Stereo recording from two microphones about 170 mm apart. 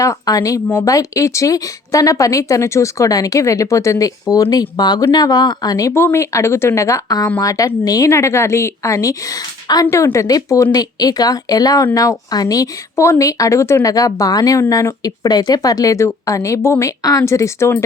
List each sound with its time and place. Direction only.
0.0 s speech: 20° left (ahead or behind)